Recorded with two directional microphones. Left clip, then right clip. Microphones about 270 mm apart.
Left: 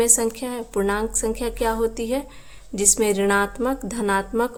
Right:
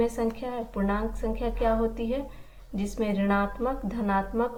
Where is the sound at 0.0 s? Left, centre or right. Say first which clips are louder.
Left 6 dB; left.